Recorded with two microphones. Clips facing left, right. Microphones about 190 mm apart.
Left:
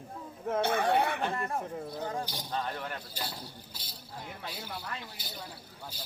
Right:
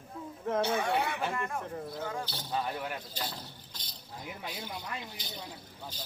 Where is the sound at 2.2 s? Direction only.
15° left (ahead or behind).